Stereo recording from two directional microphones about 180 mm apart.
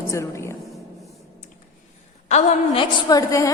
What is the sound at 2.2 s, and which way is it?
Speech, 40° left (ahead or behind).